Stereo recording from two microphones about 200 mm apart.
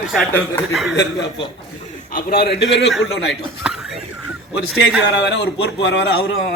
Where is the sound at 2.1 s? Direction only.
50° left (ahead or behind).